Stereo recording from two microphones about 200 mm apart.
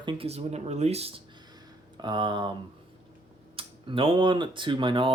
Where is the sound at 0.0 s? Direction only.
25° right (ahead or behind).